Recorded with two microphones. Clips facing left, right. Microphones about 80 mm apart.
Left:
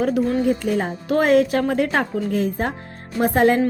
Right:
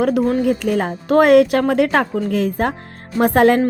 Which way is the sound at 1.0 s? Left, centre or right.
Right.